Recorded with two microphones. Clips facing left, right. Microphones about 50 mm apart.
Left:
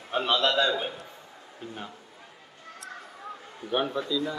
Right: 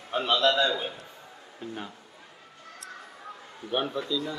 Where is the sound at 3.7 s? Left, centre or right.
Centre.